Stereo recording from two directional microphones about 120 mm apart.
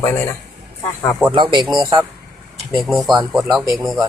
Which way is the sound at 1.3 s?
40° right (ahead or behind).